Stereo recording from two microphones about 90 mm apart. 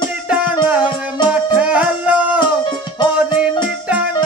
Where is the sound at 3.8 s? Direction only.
15° right (ahead or behind).